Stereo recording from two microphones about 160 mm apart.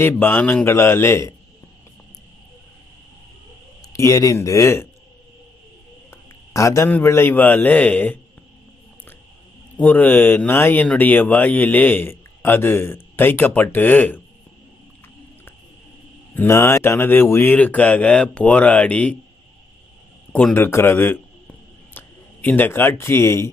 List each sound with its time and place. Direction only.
0.0 s speech: 15° left (ahead or behind)
3.9 s speech: 20° left (ahead or behind)
6.1 s a man's voice: 20° left (ahead or behind)
9.7 s speech: 10° left (ahead or behind)
16.3 s speech: 15° left (ahead or behind)
20.3 s speech: 10° left (ahead or behind)